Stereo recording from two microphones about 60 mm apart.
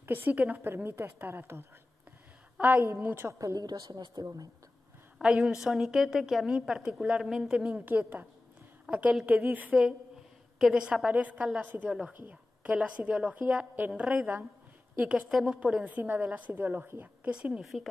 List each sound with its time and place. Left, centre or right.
0.0 s a woman's voice: right
3.0 s a woman's voice: right
3.3 s a woman's voice: right
5.2 s a woman's voice: centre
7.7 s a woman's voice: right
10.7 s a woman's voice: centre
15.2 s a woman's voice: centre
16.0 s a woman's voice: right
17.2 s a woman's voice: centre